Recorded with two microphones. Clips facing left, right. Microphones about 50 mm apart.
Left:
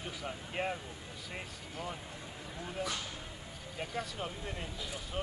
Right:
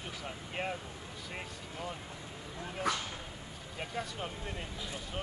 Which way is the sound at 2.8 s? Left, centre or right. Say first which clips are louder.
Right 5 dB; right.